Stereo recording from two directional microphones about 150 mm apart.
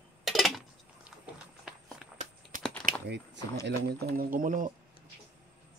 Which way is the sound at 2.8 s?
15° left (ahead or behind).